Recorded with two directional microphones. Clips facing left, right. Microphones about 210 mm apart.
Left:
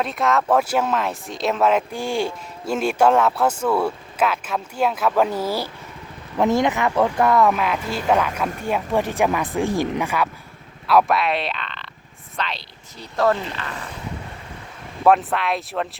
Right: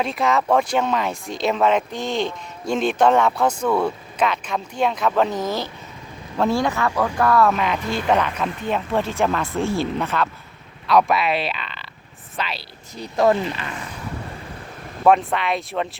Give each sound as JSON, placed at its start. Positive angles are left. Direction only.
{"t": 0.0, "sound": "speech", "side_deg": 0}
{"t": 7.5, "sound": "speech", "side_deg": 5}
{"t": 10.8, "sound": "speech", "side_deg": 0}
{"t": 15.0, "sound": "speech", "side_deg": 0}